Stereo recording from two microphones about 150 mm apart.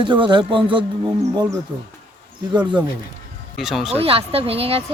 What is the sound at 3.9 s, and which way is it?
Speech, 40° right (ahead or behind).